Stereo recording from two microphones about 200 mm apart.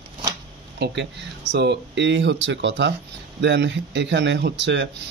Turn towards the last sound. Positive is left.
turn(degrees=-60)  # may be behind; listen again after turning